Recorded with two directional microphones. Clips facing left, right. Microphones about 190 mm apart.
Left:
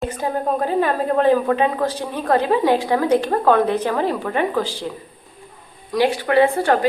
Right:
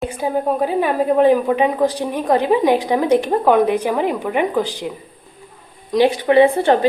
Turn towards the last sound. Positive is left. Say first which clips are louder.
# right 3 dB
turn(degrees=-20)  # may be behind; listen again after turning